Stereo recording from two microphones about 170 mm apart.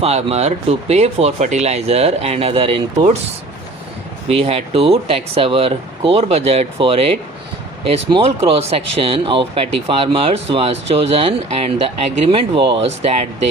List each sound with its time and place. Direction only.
0.0 s speech: 35° right (ahead or behind)
4.3 s speech: 35° right (ahead or behind)